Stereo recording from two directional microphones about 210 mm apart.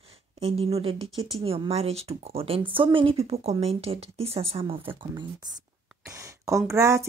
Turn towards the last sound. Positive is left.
turn(degrees=-15)  # may be behind; listen again after turning